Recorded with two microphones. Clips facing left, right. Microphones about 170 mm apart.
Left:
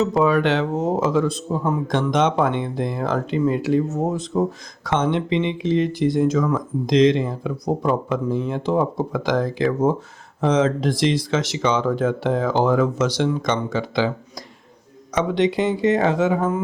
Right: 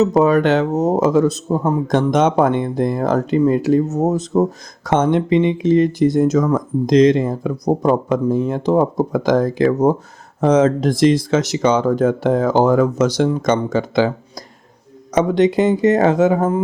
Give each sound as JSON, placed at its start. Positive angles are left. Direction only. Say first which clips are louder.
{"t": 0.0, "sound": "speech", "louder": "right 4 dB", "side_deg": -40}
{"t": 15.1, "sound": "speech", "louder": "right 5 dB", "side_deg": -40}